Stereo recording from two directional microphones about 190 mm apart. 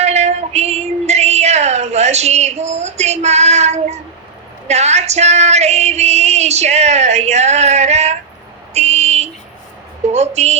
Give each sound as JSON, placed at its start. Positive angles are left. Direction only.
{"t": 0.0, "sound": "female singing", "side_deg": -35}
{"t": 8.7, "sound": "a sound", "side_deg": -35}
{"t": 10.1, "sound": "speech", "side_deg": -35}